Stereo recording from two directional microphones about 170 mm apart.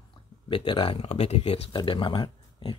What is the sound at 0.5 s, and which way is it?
Speech, 30° left (ahead or behind).